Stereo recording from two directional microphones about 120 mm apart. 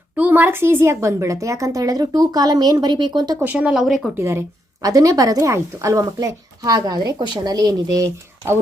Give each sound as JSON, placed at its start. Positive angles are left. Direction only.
{"t": 0.2, "sound": "a woman's voice", "side_deg": -15}
{"t": 3.4, "sound": "speech", "side_deg": -10}
{"t": 4.2, "sound": "a woman's voice", "side_deg": -20}